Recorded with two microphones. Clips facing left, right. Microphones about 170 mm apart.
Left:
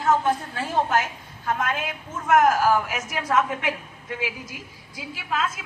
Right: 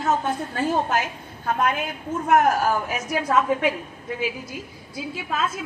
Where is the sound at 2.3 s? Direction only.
90° left.